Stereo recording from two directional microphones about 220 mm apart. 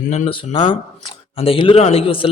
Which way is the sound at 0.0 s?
35° left (ahead or behind).